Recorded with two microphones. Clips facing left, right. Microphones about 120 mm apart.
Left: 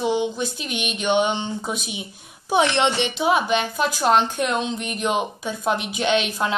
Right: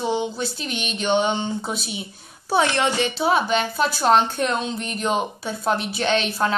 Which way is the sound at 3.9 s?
10° left (ahead or behind).